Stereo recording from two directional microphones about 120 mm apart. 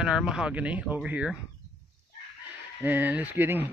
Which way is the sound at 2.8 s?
15° right (ahead or behind).